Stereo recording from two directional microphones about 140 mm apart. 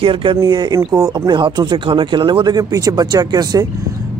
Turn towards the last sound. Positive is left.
turn(degrees=-25)  # may be behind; listen again after turning